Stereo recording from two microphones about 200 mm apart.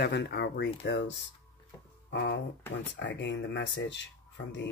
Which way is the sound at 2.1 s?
60° left (ahead or behind).